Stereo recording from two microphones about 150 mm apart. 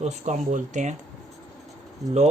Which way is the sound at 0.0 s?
50° right (ahead or behind).